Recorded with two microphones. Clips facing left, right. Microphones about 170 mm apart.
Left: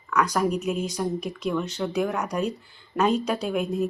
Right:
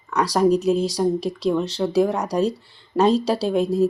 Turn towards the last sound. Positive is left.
turn(degrees=-35)  # may be behind; listen again after turning